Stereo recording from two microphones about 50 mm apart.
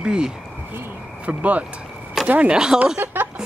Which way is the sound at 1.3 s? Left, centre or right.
Right.